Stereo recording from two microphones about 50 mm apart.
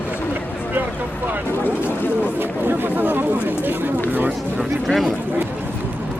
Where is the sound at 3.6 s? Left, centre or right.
Right.